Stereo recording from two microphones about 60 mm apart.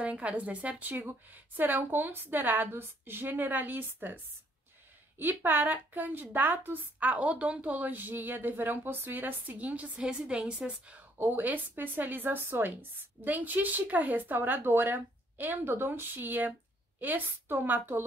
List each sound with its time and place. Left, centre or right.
0.0 s a woman's voice: right
5.2 s a woman's voice: right
9.9 s a woman's voice: centre
11.1 s a woman's voice: right